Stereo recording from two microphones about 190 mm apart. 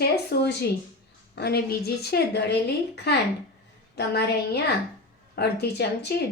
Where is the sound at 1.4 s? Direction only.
55° left (ahead or behind).